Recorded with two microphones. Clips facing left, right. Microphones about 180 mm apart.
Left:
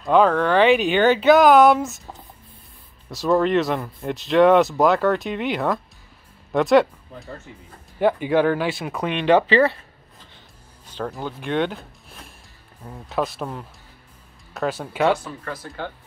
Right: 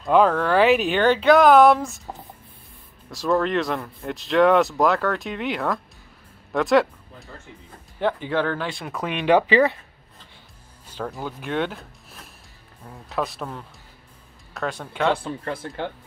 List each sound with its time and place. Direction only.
0.0 s speech: 5° right (ahead or behind)
3.1 s speech: centre (ahead or behind)
8.0 s speech: 10° left (ahead or behind)
9.0 s speech: 5° right (ahead or behind)
10.9 s speech: 5° right (ahead or behind)
15.1 s speech: 30° right (ahead or behind)